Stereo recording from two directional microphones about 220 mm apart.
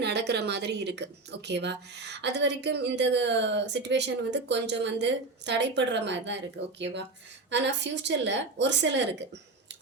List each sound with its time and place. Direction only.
0.0 s a woman's voice: 50° right (ahead or behind)